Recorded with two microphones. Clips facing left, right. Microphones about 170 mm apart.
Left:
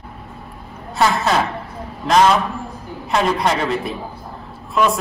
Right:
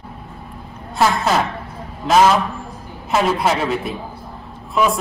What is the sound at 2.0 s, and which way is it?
A man's voice, centre (ahead or behind).